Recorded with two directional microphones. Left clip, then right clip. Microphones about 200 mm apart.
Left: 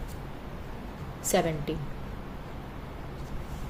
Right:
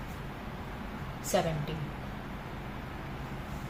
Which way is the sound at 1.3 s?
55° left (ahead or behind).